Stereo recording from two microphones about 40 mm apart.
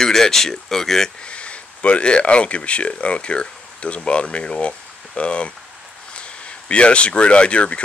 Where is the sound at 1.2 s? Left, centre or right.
Left.